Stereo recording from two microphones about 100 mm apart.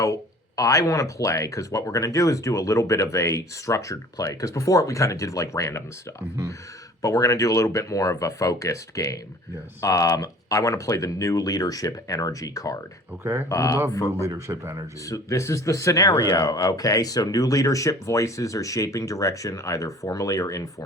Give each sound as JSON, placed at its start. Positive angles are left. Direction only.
{"t": 0.0, "sound": "speech", "side_deg": 35}
{"t": 13.2, "sound": "speech", "side_deg": -20}
{"t": 13.5, "sound": "speech", "side_deg": 30}
{"t": 14.2, "sound": "a man's voice", "side_deg": -30}
{"t": 15.0, "sound": "speech", "side_deg": 35}